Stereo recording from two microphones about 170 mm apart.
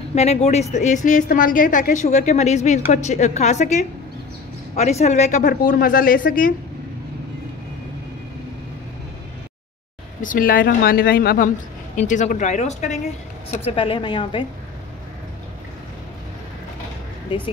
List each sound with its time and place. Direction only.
0.1 s a woman's voice: 40° left (ahead or behind); by 6.5 s 55° left (ahead or behind)
10.2 s a woman's voice: 55° left (ahead or behind)
13.7 s speech: 30° left (ahead or behind)